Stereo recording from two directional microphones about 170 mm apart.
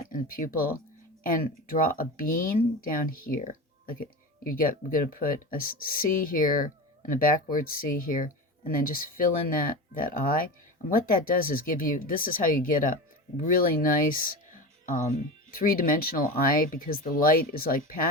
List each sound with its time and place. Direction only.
0.1 s speech: 55° left (ahead or behind)
2.0 s speech: 55° left (ahead or behind)